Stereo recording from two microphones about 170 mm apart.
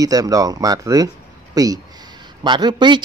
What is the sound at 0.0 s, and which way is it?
Speech, 20° right (ahead or behind).